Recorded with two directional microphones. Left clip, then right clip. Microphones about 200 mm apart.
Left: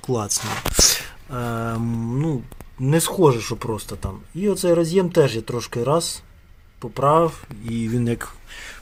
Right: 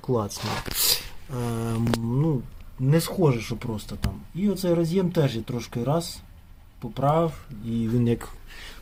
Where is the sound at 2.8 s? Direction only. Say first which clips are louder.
Left 5 dB; 15° left (ahead or behind).